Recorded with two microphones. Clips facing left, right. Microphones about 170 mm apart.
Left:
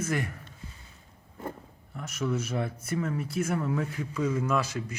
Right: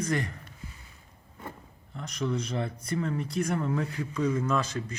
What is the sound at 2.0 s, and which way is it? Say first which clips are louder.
Speech: even; 5° left (ahead or behind).